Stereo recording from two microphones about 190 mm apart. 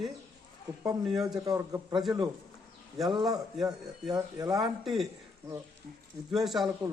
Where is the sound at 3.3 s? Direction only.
20° right (ahead or behind).